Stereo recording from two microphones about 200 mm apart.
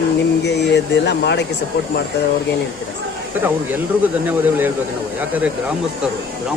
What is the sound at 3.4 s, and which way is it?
Speech, 10° right (ahead or behind).